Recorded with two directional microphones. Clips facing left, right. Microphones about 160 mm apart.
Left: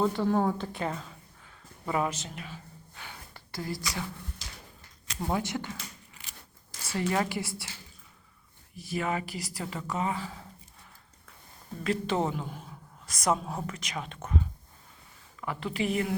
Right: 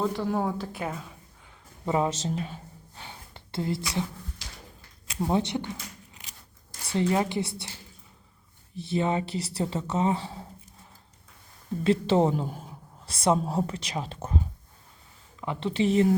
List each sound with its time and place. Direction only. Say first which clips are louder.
0.0 s speech: left 1 dB; centre (ahead or behind)
1.8 s a sound: right 4 dB; 25° right (ahead or behind)
5.3 s speech: right 4 dB; 20° right (ahead or behind)
6.9 s speech: right 4 dB; 20° right (ahead or behind)
8.7 s speech: right 5 dB; 25° right (ahead or behind)
11.8 s a woman's voice: right 6 dB; 30° right (ahead or behind)
12.6 s a woman's voice: right 2 dB; 30° right (ahead or behind)